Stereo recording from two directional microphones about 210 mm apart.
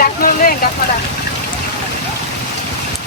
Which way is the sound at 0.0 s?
45° left (ahead or behind).